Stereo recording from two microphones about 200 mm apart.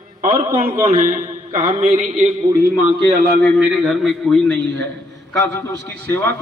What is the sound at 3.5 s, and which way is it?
A man's voice, centre (ahead or behind).